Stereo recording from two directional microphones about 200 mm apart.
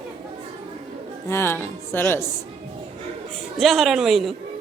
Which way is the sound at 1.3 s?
10° left (ahead or behind).